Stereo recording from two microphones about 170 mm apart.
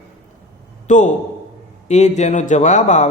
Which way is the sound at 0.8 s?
45° left (ahead or behind).